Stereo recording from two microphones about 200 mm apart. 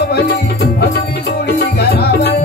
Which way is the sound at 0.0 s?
55° left (ahead or behind).